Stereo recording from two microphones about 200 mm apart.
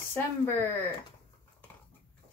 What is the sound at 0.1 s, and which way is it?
Speech, 10° left (ahead or behind).